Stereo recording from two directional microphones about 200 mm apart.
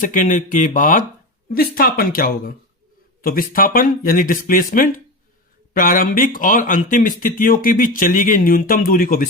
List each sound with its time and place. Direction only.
0.0 s speech: 40° left (ahead or behind)